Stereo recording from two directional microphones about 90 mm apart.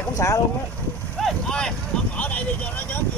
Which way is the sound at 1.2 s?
10° left (ahead or behind).